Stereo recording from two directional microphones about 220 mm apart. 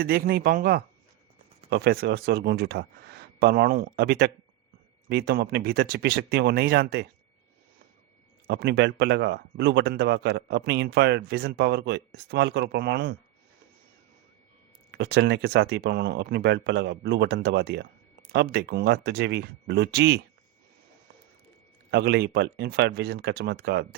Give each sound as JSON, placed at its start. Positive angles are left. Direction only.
{"t": 0.0, "sound": "speech", "side_deg": -40}
{"t": 8.4, "sound": "speech", "side_deg": -50}
{"t": 14.9, "sound": "speech", "side_deg": -50}
{"t": 21.8, "sound": "speech", "side_deg": -50}